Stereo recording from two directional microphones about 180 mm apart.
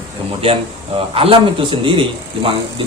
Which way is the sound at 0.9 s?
30° right (ahead or behind).